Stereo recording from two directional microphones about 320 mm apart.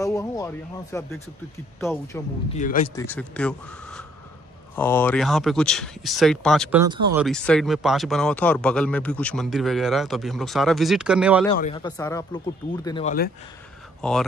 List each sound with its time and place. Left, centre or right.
0.0 s speech: centre
2.5 s speech: left
3.0 s speech: centre
7.2 s speech: centre
11.5 s speech: centre
14.0 s speech: centre